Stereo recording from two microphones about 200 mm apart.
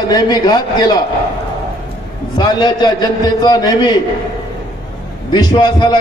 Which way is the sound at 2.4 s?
20° left (ahead or behind).